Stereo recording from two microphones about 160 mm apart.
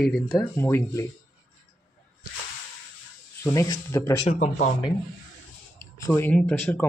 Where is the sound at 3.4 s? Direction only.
20° left (ahead or behind).